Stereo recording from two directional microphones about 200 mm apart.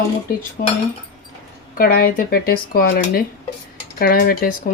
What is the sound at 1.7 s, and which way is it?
Speech, 45° left (ahead or behind).